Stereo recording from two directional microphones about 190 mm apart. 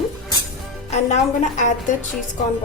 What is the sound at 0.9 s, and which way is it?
Speech, 40° left (ahead or behind).